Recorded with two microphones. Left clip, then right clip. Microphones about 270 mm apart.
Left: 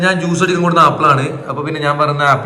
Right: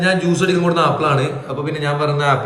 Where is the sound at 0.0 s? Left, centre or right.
Centre.